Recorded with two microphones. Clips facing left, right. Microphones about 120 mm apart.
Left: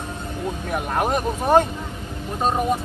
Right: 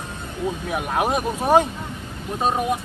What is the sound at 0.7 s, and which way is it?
Speech, 5° right (ahead or behind).